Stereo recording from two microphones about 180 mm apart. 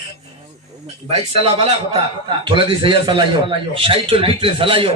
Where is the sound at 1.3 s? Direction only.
35° right (ahead or behind).